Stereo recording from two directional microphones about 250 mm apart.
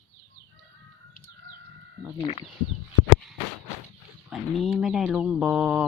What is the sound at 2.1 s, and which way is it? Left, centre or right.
Speech, left.